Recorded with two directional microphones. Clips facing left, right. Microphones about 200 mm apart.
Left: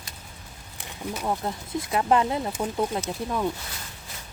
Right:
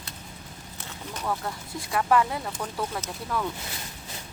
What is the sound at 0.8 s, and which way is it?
Boat, 10° left (ahead or behind).